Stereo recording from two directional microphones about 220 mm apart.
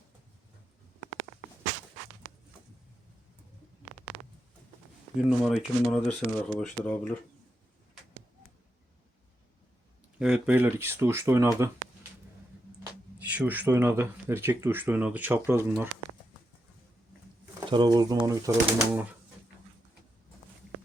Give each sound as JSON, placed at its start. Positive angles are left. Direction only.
{"t": 5.1, "sound": "speech", "side_deg": 0}
{"t": 10.2, "sound": "speech", "side_deg": -5}
{"t": 13.2, "sound": "speech", "side_deg": -5}
{"t": 17.7, "sound": "speech", "side_deg": -20}